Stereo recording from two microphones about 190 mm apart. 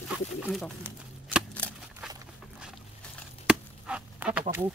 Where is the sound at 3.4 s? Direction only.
5° right (ahead or behind).